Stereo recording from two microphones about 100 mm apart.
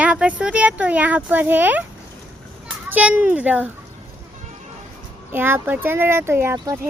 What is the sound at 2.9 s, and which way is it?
Speech, 15° right (ahead or behind).